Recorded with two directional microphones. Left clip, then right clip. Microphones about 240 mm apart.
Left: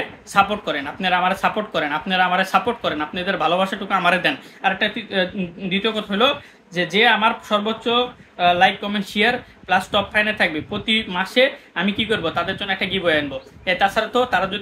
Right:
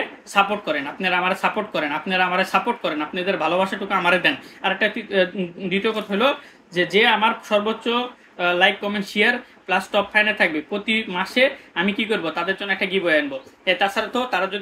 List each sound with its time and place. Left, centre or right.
0.3 s speech: centre